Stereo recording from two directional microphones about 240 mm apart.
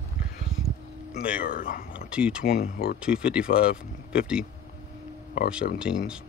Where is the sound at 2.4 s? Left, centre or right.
Left.